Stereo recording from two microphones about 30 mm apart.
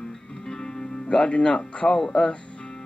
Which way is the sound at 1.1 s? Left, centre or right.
Left.